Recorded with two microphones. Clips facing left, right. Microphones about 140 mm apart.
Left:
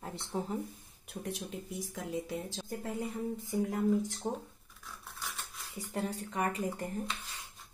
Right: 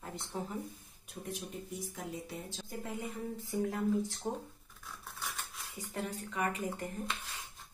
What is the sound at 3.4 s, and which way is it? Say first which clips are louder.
Speech: left 2 dB; 20° left (ahead or behind).